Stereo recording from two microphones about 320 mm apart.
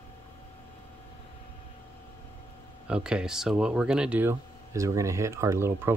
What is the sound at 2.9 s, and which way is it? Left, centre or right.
Speech, centre.